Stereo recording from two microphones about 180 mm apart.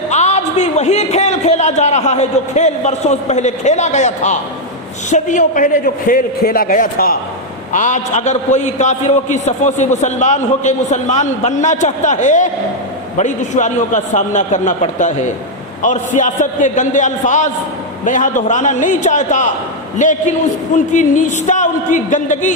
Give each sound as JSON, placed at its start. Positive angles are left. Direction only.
{"t": 0.1, "sound": "a man's voice", "side_deg": 40}
{"t": 7.7, "sound": "a man's voice", "side_deg": 45}